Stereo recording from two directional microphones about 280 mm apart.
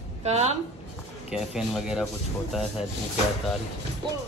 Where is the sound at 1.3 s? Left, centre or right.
Centre.